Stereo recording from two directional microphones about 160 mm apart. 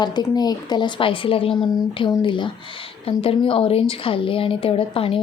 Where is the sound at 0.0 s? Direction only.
25° left (ahead or behind).